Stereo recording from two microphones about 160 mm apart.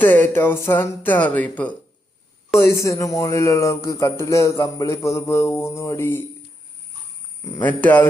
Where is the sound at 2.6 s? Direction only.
20° left (ahead or behind).